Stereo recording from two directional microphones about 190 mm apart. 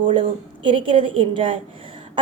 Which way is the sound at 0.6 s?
25° right (ahead or behind).